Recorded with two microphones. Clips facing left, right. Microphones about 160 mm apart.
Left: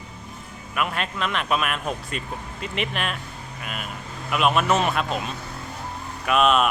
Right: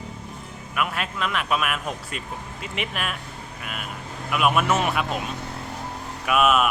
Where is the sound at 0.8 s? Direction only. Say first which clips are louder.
Left 1 dB; 5° right (ahead or behind).